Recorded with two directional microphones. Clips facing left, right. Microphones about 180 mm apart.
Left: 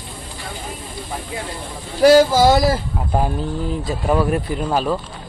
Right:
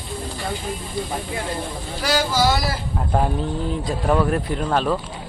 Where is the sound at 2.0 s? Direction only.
50° left (ahead or behind).